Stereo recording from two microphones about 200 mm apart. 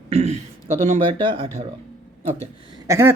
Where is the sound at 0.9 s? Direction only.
25° right (ahead or behind).